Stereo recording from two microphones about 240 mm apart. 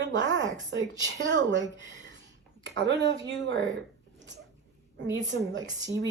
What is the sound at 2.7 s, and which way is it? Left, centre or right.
Speech, right.